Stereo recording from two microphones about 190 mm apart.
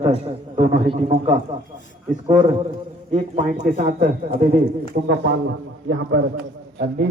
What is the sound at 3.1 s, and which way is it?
A man's voice, 40° right (ahead or behind).